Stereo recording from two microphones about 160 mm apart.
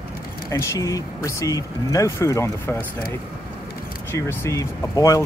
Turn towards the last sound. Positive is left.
turn(degrees=20)  # may be behind; listen again after turning